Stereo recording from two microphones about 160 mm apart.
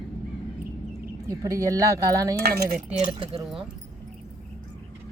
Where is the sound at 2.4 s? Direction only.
75° right (ahead or behind).